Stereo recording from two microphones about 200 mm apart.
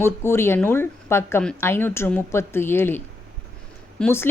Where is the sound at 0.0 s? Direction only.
10° left (ahead or behind).